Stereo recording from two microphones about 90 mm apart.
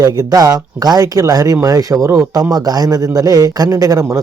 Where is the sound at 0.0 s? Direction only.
40° right (ahead or behind).